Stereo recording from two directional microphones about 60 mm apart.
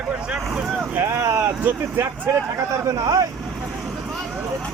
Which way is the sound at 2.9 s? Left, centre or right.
Right.